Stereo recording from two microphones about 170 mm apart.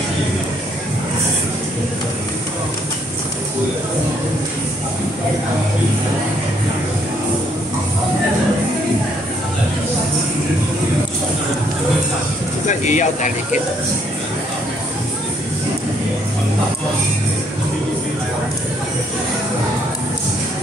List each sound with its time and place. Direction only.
12.6 s speech: 45° left (ahead or behind)